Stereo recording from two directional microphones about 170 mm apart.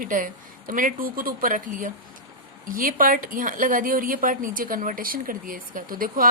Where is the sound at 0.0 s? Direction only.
50° right (ahead or behind).